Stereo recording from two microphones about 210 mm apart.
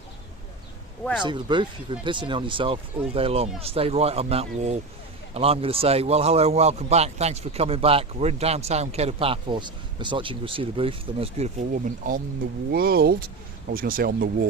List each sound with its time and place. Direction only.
1.2 s a man's voice: 20° right (ahead or behind); by 14.3 s 45° right (ahead or behind)